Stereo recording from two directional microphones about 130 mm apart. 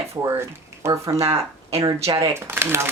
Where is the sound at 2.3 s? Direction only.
20° right (ahead or behind).